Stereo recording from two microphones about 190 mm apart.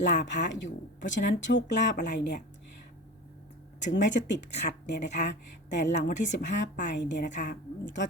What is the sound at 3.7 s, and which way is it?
Speech, 70° left (ahead or behind).